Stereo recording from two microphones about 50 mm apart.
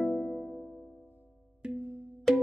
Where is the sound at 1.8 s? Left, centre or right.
Right.